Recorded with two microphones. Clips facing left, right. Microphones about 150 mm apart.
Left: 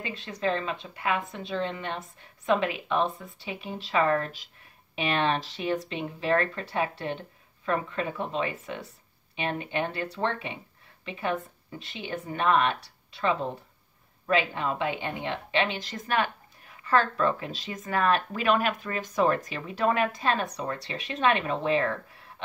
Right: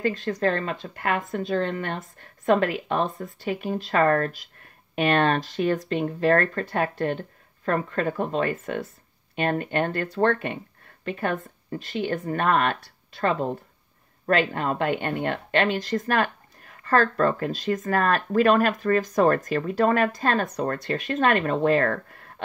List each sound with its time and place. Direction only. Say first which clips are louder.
0.0 s a woman's voice: right 7 dB; 45° right (ahead or behind)